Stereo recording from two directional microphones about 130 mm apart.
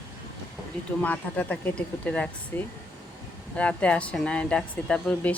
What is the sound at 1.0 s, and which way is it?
Speech, 10° left (ahead or behind).